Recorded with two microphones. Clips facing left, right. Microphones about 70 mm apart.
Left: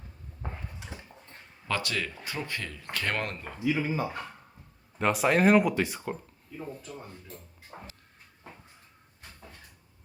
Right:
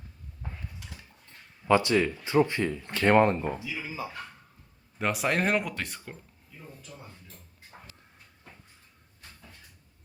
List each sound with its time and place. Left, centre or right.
0.8 s a sound: left
1.6 s speech: right
3.6 s speech: left
4.9 s speech: centre